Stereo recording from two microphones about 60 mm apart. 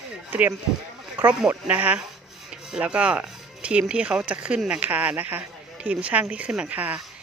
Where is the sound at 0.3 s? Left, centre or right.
Right.